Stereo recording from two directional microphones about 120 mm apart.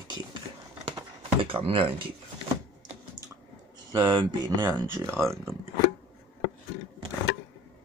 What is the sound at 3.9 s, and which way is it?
Speech, 40° right (ahead or behind).